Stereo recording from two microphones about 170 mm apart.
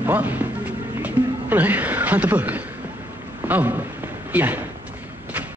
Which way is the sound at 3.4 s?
10° right (ahead or behind).